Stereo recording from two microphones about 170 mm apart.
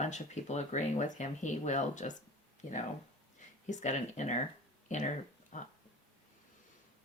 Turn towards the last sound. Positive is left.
turn(degrees=45)  # may be behind; listen again after turning